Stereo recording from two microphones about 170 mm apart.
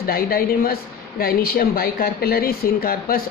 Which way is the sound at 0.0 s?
60° left (ahead or behind).